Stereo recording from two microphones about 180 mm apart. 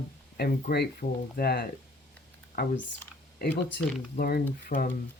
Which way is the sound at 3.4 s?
60° left (ahead or behind).